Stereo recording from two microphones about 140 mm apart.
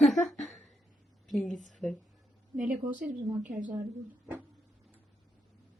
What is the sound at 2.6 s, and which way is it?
Speech, 70° right (ahead or behind).